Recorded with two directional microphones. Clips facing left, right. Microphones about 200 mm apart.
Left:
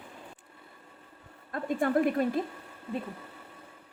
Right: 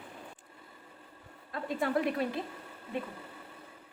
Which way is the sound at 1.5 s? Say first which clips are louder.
Left 4 dB; 50° left (ahead or behind).